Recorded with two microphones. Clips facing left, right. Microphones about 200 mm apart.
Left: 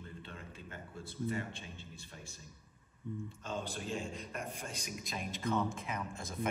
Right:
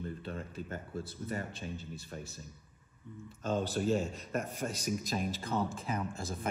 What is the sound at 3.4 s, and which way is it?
A man's voice, 40° right (ahead or behind).